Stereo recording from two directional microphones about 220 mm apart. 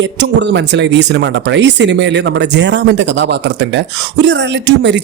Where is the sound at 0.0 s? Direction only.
55° right (ahead or behind).